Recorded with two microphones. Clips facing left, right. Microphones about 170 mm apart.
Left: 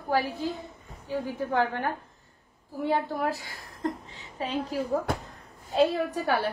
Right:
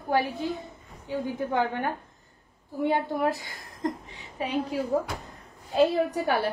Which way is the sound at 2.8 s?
20° right (ahead or behind).